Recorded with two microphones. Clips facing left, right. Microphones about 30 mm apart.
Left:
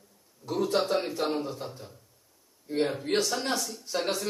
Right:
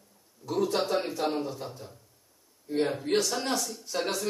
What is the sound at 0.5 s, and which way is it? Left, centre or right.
Speech, centre.